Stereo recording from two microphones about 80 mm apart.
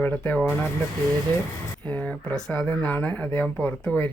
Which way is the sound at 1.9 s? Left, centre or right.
Centre.